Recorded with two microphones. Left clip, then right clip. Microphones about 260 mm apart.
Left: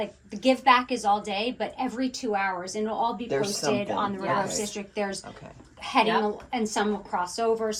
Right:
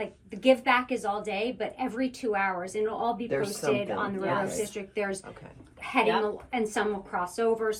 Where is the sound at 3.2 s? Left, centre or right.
Left.